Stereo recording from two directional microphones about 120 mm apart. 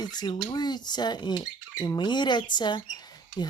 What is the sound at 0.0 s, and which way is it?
Speech, 35° left (ahead or behind).